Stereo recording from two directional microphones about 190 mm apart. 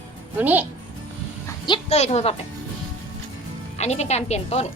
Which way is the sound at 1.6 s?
30° left (ahead or behind).